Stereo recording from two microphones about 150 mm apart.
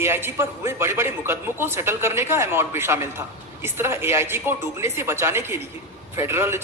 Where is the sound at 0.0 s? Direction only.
15° right (ahead or behind).